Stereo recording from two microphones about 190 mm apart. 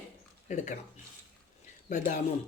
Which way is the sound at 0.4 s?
40° left (ahead or behind).